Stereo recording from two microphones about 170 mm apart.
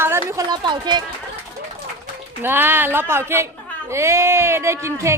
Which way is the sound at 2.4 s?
10° right (ahead or behind).